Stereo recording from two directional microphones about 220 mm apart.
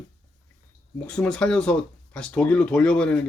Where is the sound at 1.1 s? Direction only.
5° left (ahead or behind).